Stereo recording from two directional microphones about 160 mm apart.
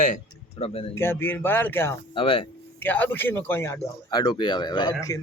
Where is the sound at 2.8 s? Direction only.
10° left (ahead or behind).